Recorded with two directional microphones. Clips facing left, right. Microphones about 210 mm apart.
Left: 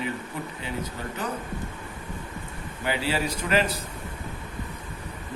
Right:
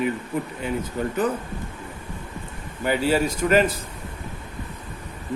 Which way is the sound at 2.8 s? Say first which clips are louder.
Right 6 dB; 45° right (ahead or behind).